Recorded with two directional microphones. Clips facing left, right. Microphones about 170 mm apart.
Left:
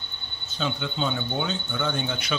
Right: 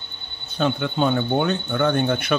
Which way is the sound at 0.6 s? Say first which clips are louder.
Right 7 dB; 55° right (ahead or behind).